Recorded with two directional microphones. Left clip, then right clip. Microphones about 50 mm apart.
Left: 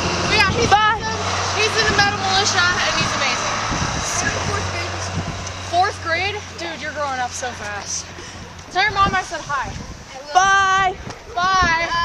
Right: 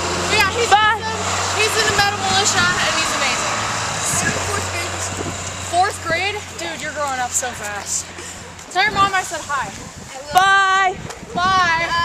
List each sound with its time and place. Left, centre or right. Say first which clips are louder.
0.0 s vehicle: even; left
0.7 s vehicle: right 1 dB; left
4.3 s music: right 1 dB; centre
5.0 s vehicle: right 2 dB; centre
5.7 s a sound: right 1 dB; left
7.0 s vehicle: right 2 dB; centre
8.7 s speech: right 1 dB; left
9.0 s speech: right 1 dB; centre
11.3 s speech: right 1 dB; left